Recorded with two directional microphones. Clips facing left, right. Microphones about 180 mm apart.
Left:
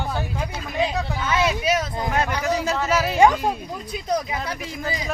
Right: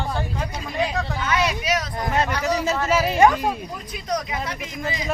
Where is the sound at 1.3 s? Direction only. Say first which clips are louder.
Left 2 dB; 25° left (ahead or behind).